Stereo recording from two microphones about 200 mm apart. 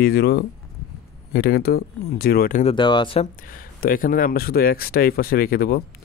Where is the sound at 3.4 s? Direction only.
45° left (ahead or behind).